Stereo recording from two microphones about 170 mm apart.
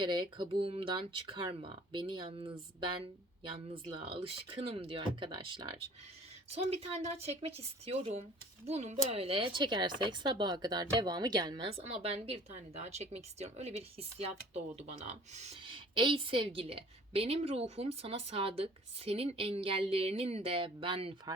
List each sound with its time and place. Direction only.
0.0 s speech: 30° right (ahead or behind)